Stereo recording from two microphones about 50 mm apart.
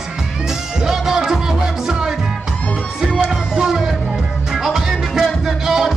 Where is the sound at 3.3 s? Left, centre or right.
Centre.